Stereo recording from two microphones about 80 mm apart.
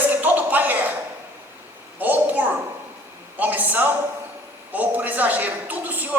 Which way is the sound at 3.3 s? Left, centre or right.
Right.